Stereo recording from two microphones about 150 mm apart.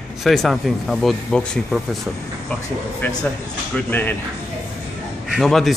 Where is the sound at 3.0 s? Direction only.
15° left (ahead or behind).